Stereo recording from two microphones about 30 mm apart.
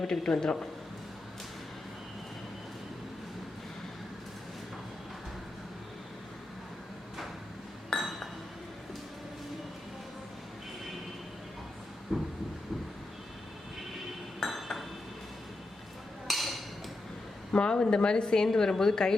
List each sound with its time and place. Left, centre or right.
0.0 s a man's voice: left
7.9 s chink: centre
12.1 s a sound: right
14.5 s chink: centre
16.2 s a sound: centre
17.6 s a woman's voice: left
18.4 s a woman's voice: centre